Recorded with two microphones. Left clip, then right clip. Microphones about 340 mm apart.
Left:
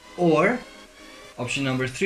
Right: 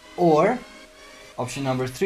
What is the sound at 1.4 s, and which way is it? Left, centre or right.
Speech, centre.